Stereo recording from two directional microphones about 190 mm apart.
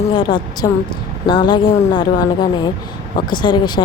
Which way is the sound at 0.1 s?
25° left (ahead or behind).